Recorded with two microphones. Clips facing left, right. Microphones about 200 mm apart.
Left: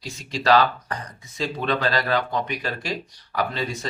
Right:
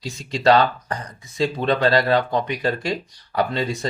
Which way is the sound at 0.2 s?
35° right (ahead or behind).